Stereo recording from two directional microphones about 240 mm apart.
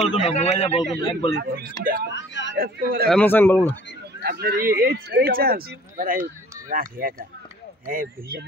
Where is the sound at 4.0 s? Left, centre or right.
Right.